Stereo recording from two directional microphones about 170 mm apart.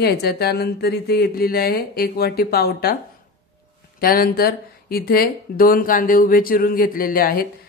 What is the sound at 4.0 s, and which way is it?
Speech, 60° left (ahead or behind).